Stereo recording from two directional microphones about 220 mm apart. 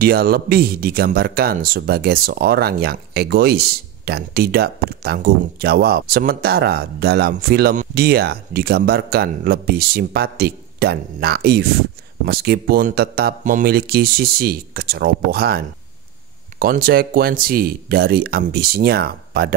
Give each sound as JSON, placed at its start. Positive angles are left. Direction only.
{"t": 0.0, "sound": "speech", "side_deg": -45}